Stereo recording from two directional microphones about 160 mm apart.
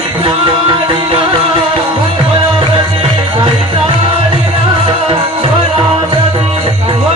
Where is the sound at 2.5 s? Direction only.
30° right (ahead or behind).